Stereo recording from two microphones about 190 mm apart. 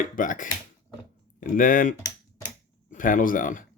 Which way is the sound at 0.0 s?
45° left (ahead or behind).